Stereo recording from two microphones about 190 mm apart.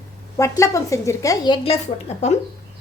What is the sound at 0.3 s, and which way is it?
A child's voice, 15° left (ahead or behind).